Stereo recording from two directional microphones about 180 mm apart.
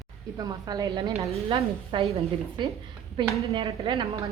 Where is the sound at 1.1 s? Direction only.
30° right (ahead or behind).